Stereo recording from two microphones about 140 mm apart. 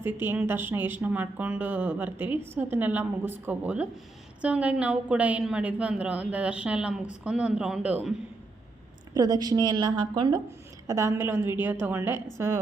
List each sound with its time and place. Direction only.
0.0 s a woman's voice: 15° right (ahead or behind)
9.1 s a woman's voice: 25° right (ahead or behind)